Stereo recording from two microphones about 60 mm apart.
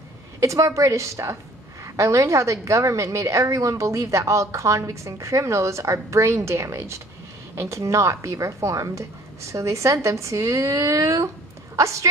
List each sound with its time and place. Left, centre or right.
0.4 s a woman's voice: right